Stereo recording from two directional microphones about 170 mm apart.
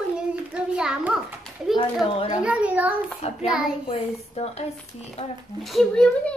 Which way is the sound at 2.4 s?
5° right (ahead or behind).